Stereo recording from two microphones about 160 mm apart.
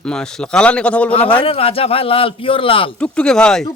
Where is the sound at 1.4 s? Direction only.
35° left (ahead or behind).